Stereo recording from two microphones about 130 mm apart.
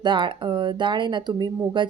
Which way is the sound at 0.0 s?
35° right (ahead or behind).